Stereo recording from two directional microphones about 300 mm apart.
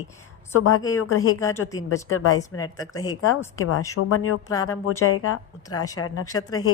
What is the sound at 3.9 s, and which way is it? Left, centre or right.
A woman's voice, left.